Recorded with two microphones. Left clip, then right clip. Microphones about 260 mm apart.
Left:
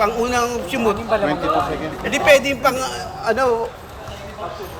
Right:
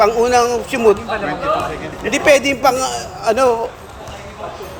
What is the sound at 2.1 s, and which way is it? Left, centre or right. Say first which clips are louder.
A man's voice: right 2 dB; centre.